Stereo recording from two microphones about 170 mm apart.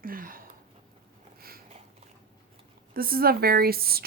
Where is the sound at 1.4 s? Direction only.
60° right (ahead or behind).